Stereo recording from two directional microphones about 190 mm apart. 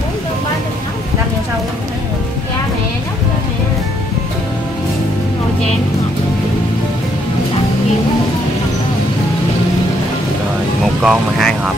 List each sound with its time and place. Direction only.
11.0 s speech: centre (ahead or behind)